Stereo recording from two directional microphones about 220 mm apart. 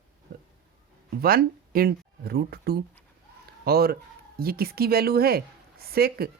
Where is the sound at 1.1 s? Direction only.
40° right (ahead or behind).